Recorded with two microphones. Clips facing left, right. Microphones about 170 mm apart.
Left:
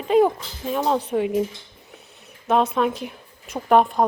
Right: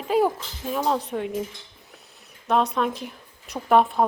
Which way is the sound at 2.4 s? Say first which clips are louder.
Left 3 dB; centre (ahead or behind).